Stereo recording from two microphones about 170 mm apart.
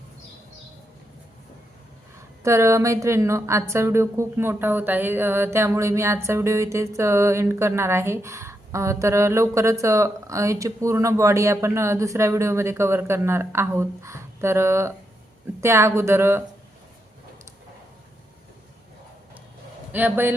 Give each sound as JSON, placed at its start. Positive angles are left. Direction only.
{"t": 2.4, "sound": "speech", "side_deg": -15}
{"t": 19.9, "sound": "speech", "side_deg": -10}